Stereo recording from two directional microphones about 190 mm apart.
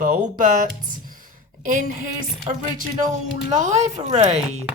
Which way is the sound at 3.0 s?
40° right (ahead or behind).